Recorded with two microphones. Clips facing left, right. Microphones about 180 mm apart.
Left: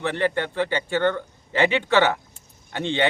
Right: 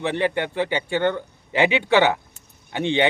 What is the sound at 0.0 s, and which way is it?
A man's voice, 15° right (ahead or behind).